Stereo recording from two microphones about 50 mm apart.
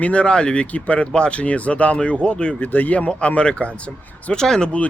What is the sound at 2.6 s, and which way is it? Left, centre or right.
Speech, left.